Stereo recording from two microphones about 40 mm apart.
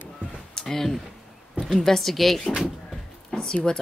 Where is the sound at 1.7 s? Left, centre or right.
Centre.